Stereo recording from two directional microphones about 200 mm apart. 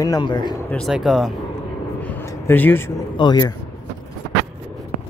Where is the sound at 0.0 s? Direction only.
20° left (ahead or behind).